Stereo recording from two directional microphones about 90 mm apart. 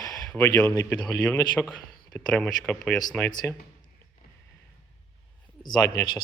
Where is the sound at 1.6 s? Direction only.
5° left (ahead or behind).